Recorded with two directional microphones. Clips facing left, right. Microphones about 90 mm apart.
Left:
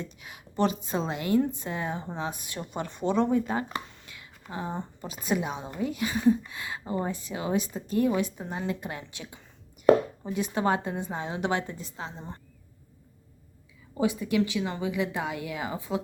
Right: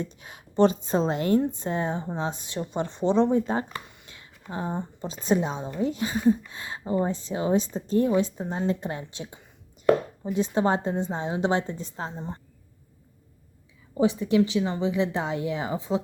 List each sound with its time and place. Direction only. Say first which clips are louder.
0.0 s speech: right 5 dB; 35° right (ahead or behind)
4.0 s whispering: right 2 dB; 30° right (ahead or behind)
4.9 s speech: right 5 dB; 30° right (ahead or behind)
14.0 s speech: right 4 dB; 25° right (ahead or behind)